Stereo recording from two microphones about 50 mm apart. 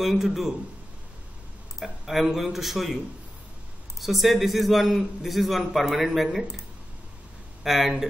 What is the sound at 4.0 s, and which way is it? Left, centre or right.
A man's voice, centre.